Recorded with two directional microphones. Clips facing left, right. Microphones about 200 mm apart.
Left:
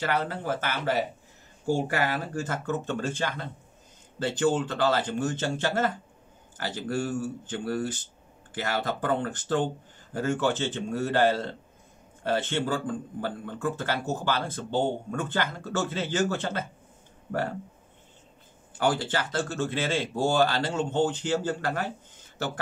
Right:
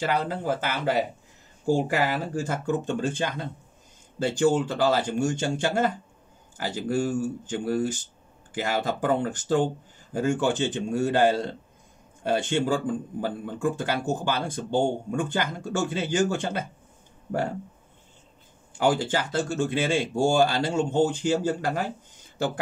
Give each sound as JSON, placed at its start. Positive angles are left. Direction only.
{"t": 0.0, "sound": "a man's voice", "side_deg": -10}
{"t": 2.4, "sound": "a man's voice", "side_deg": -15}
{"t": 18.8, "sound": "a man's voice", "side_deg": -10}